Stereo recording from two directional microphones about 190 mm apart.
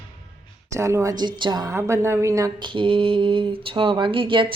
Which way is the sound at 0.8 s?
15° right (ahead or behind).